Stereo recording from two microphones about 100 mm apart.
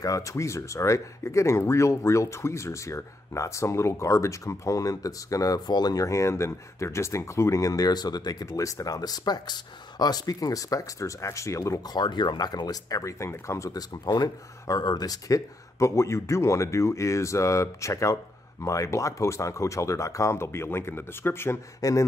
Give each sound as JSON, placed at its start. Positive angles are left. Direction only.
{"t": 0.0, "sound": "speech", "side_deg": 35}
{"t": 11.9, "sound": "speech", "side_deg": 45}